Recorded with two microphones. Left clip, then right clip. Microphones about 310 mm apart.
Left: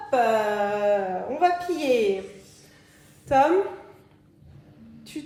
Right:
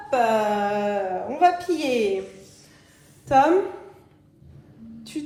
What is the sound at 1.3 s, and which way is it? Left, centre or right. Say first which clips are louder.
Speech: right 3 dB; right.